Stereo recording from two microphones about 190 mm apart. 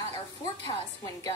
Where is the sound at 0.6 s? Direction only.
15° left (ahead or behind).